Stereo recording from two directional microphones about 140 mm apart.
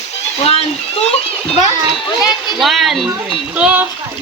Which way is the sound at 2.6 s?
Centre (ahead or behind).